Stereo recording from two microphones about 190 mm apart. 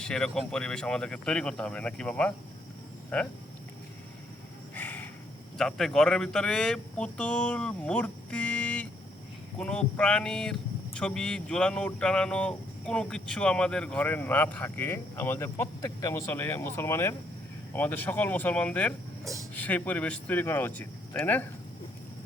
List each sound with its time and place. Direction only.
0.0 s speech: 5° left (ahead or behind)
4.7 s a sound: 10° left (ahead or behind)
5.5 s speech: centre (ahead or behind)
19.2 s speech: 15° right (ahead or behind)
19.5 s speech: 10° left (ahead or behind)